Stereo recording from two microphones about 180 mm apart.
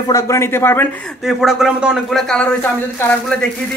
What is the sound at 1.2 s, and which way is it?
Speech, centre (ahead or behind).